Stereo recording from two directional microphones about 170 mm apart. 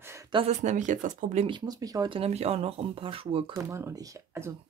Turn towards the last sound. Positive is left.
turn(degrees=-15)  # may be behind; listen again after turning